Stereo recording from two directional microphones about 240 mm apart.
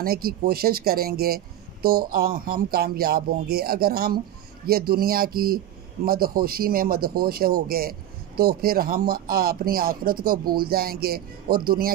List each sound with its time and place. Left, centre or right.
0.0 s speech: right